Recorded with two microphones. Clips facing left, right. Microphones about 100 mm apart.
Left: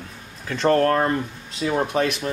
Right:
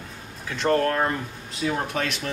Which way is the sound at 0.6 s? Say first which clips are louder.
Left 4 dB; 50° left (ahead or behind).